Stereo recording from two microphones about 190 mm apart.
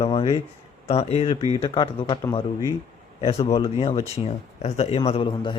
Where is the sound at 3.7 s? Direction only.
35° left (ahead or behind).